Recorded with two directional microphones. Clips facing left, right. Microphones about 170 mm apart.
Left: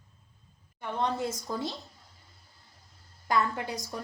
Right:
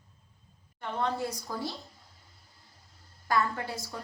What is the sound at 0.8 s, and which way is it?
Speech, 20° left (ahead or behind).